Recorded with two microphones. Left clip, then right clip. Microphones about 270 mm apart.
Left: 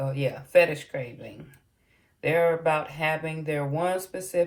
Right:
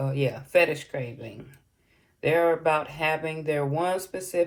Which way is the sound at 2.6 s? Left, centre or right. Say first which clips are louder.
Right 1 dB; right.